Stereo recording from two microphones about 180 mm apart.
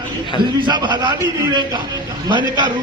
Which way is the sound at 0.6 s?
25° right (ahead or behind).